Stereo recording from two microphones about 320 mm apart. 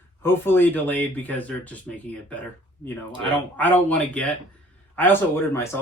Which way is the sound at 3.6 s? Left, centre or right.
Centre.